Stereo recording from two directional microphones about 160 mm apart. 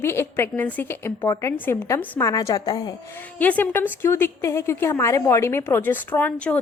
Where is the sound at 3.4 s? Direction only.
10° left (ahead or behind).